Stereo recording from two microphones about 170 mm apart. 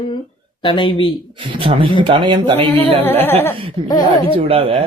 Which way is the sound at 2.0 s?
25° right (ahead or behind).